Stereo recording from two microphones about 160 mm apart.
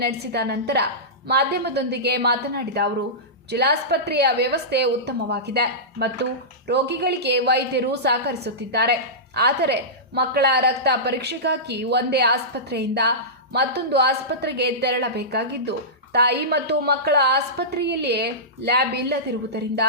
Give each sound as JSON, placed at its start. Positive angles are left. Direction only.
{"t": 0.0, "sound": "a woman's voice", "side_deg": -90}